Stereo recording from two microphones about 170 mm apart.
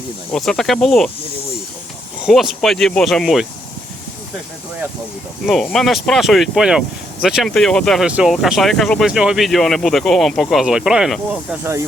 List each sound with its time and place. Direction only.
0.3 s speech: 5° left (ahead or behind)
2.2 s speech: centre (ahead or behind)
5.5 s speech: centre (ahead or behind)
11.6 s speech: 15° right (ahead or behind)